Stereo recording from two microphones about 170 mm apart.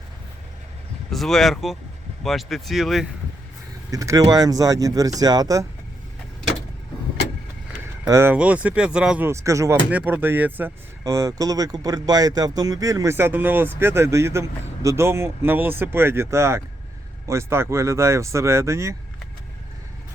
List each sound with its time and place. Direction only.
1.1 s speech: centre (ahead or behind)
3.9 s speech: 20° right (ahead or behind)
8.0 s speech: 15° right (ahead or behind)